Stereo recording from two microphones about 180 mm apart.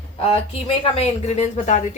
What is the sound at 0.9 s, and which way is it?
Speech, 35° left (ahead or behind).